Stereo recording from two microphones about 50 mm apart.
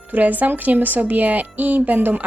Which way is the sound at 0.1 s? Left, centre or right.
Right.